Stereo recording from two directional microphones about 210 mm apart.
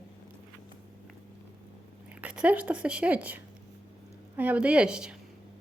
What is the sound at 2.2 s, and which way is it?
A woman's voice, 5° right (ahead or behind).